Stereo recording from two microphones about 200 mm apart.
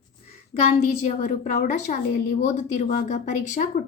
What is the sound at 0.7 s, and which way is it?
Speech, 35° left (ahead or behind).